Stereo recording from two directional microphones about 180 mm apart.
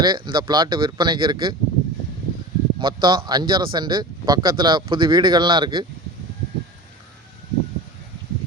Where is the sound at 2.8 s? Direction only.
25° right (ahead or behind).